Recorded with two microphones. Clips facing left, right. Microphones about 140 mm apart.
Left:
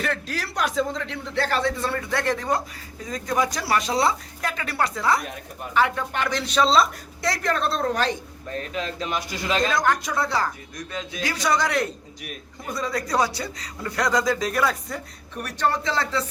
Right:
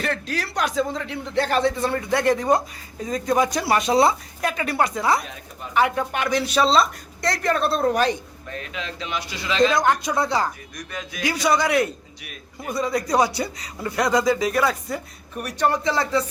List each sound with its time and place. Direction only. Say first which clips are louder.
0.0 s a man's voice: right 2 dB; centre (ahead or behind)
8.5 s speech: left 3 dB; 40° left (ahead or behind)
9.7 s a man's voice: right 2 dB; 20° right (ahead or behind)
10.8 s speech: left 1 dB; 25° left (ahead or behind)
11.2 s a man's voice: right 3 dB; 15° right (ahead or behind)